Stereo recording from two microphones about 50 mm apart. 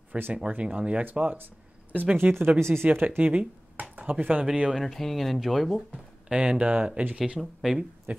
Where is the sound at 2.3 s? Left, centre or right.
Right.